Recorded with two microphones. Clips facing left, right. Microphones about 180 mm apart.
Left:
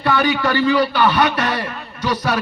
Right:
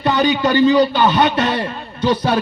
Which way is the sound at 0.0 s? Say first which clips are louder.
Right 2 dB; 20° right (ahead or behind).